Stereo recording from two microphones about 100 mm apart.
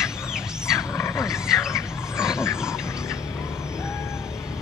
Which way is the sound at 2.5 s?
5° right (ahead or behind).